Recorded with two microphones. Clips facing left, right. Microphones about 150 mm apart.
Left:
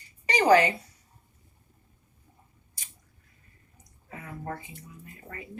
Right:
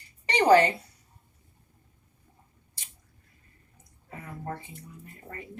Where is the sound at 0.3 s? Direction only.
30° right (ahead or behind).